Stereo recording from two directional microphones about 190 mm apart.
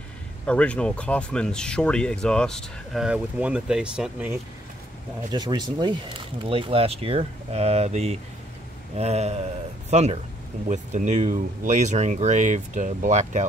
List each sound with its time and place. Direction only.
0.5 s speech: 5° left (ahead or behind)
5.3 s speech: 25° right (ahead or behind); by 13.5 s 40° right (ahead or behind)